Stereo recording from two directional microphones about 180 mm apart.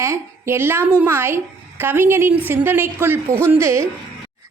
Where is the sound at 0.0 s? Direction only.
15° right (ahead or behind).